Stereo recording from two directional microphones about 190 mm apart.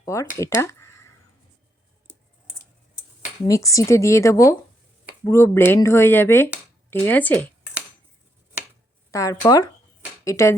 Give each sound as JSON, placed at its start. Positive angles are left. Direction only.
{"t": 0.0, "sound": "speech", "side_deg": 15}
{"t": 3.4, "sound": "speech", "side_deg": 15}
{"t": 9.1, "sound": "speech", "side_deg": 15}